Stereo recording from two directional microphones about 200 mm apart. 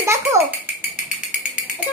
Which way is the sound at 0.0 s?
15° right (ahead or behind).